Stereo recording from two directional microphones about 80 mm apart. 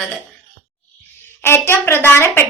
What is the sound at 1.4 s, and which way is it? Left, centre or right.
Speech, left.